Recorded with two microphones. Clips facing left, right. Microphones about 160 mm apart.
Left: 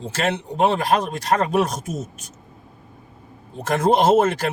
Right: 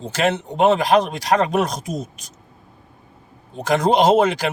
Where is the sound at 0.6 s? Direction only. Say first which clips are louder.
Right 4 dB; 75° right (ahead or behind).